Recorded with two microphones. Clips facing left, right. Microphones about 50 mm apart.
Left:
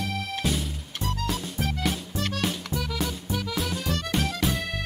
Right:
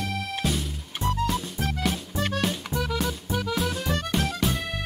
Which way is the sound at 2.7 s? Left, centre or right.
Centre.